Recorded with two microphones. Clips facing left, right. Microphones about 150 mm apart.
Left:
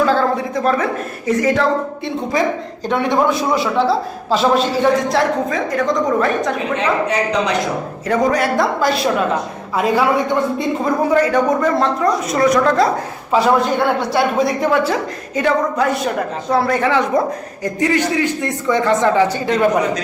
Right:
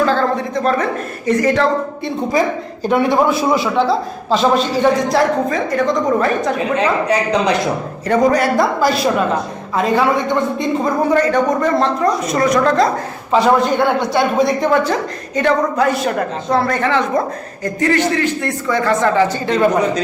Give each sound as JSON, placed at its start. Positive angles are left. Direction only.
{"t": 0.0, "sound": "a sound", "side_deg": 5}
{"t": 1.3, "sound": "a woman's voice", "side_deg": 0}
{"t": 2.8, "sound": "a woman's voice", "side_deg": -5}
{"t": 6.7, "sound": "a man's voice", "side_deg": -35}
{"t": 8.0, "sound": "a woman's voice", "side_deg": 0}